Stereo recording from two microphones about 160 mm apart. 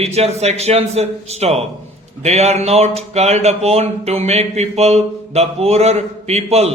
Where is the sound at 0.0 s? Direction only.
40° right (ahead or behind).